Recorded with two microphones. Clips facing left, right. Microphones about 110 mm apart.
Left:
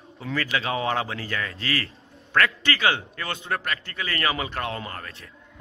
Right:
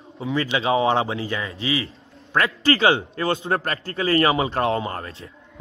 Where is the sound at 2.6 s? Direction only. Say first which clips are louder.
Right 6 dB; 30° right (ahead or behind).